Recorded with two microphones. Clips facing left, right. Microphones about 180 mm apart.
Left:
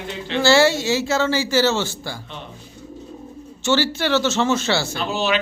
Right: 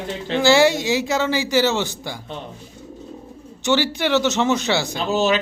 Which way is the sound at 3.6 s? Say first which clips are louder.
Even; 15° right (ahead or behind).